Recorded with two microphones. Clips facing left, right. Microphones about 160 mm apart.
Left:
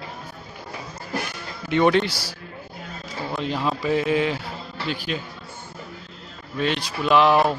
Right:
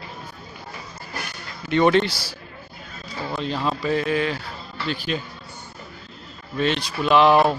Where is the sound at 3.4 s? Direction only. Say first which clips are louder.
Even; 15° left (ahead or behind).